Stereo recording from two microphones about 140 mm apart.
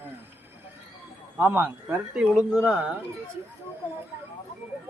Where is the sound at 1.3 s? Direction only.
15° right (ahead or behind).